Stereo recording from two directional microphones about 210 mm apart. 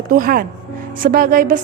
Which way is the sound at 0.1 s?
40° right (ahead or behind).